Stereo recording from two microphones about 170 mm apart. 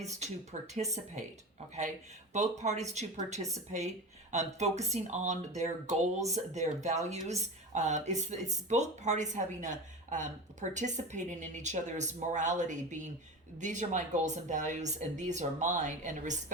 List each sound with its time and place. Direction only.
0.0 s speech: 40° right (ahead or behind)
2.3 s speech: 45° right (ahead or behind)